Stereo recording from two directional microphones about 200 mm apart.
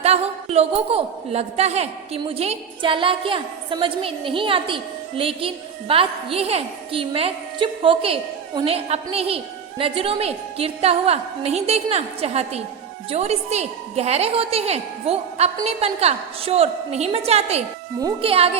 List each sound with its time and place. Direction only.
0.0 s a man's voice: 30° right (ahead or behind)